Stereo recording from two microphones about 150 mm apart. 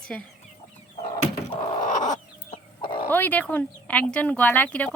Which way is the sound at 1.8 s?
60° left (ahead or behind).